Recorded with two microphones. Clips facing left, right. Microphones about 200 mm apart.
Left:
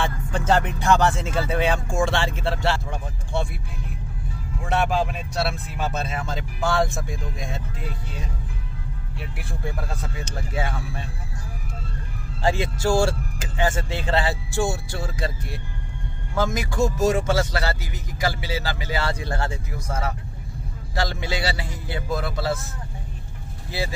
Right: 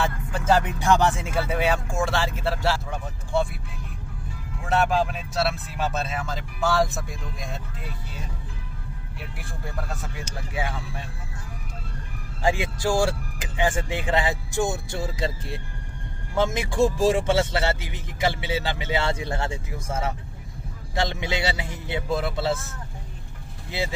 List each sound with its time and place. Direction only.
0.0 s speech: 5° right (ahead or behind)
4.6 s speech: centre (ahead or behind)
10.2 s speech: 10° right (ahead or behind)
12.4 s a man's voice: 15° right (ahead or behind)